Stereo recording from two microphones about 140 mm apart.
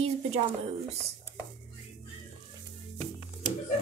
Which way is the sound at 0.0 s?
50° right (ahead or behind).